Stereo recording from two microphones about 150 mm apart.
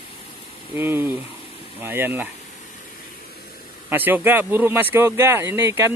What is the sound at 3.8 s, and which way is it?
Speech, 15° right (ahead or behind).